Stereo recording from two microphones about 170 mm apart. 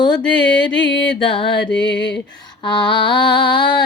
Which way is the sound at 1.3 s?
30° left (ahead or behind).